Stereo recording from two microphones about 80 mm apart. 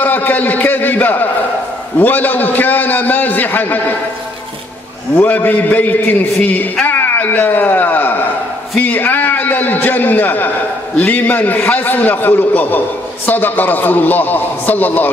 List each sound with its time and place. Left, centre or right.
0.0 s a man's voice: left
5.1 s a man's voice: left